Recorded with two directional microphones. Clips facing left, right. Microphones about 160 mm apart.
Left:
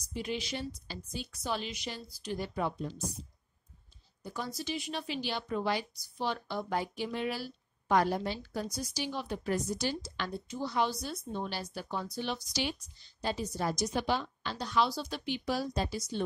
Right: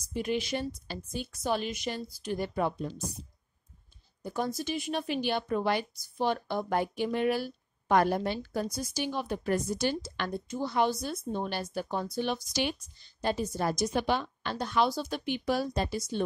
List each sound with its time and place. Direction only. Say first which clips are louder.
0.1 s a woman's voice: right 5 dB; 50° right (ahead or behind)
4.2 s a woman's voice: right 6 dB; 50° right (ahead or behind)